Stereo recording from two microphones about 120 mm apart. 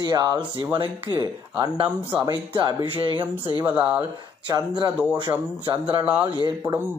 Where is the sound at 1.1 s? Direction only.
35° left (ahead or behind).